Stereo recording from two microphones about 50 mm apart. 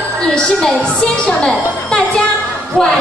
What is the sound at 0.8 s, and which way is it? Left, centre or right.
A woman's voice, centre.